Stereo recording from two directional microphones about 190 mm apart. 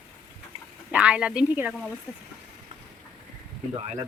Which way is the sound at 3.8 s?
30° right (ahead or behind).